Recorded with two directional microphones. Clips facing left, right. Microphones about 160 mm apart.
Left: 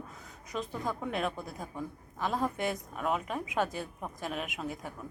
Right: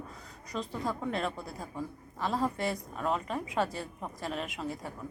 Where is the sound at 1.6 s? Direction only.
Centre (ahead or behind).